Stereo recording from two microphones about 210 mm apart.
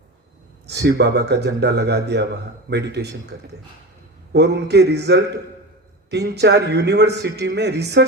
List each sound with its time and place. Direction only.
0.7 s a man's voice: 55° right (ahead or behind)
4.3 s a man's voice: 55° right (ahead or behind)